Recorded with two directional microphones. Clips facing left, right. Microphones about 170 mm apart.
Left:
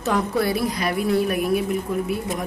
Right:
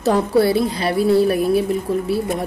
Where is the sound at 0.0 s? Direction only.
30° right (ahead or behind).